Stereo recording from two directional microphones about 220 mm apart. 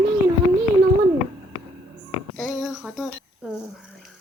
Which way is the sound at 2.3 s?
Centre (ahead or behind).